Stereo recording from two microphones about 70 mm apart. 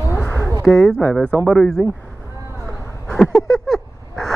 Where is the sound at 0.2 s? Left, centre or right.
Left.